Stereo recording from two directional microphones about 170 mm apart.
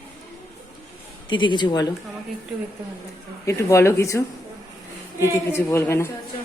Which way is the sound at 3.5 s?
15° left (ahead or behind).